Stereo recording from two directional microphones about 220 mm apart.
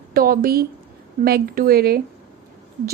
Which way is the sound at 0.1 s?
40° right (ahead or behind).